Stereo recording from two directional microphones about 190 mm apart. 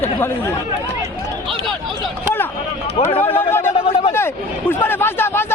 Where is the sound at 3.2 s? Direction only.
10° left (ahead or behind).